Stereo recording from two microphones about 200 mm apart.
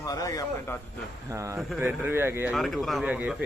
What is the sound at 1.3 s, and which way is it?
Speech, 15° right (ahead or behind).